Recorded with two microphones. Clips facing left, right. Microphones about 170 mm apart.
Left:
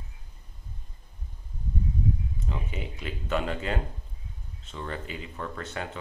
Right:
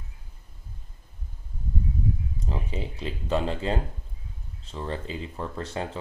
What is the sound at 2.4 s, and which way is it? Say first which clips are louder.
Speech: right 4 dB; 35° right (ahead or behind).